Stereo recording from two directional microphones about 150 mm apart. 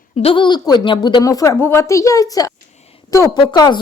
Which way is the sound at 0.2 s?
35° left (ahead or behind).